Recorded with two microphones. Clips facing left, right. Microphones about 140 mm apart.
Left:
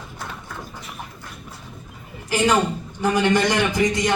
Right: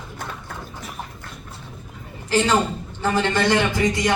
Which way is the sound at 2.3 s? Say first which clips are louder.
Even; 10° left (ahead or behind).